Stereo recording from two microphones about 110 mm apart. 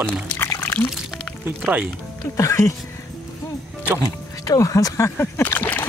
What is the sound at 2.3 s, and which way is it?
Speech, 30° left (ahead or behind).